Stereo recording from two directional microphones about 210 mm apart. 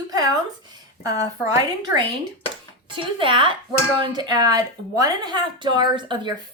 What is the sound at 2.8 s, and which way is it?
A woman's voice, 25° right (ahead or behind).